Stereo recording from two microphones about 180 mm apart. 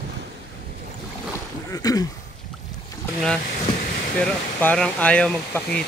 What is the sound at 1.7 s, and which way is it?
Speech, 20° left (ahead or behind).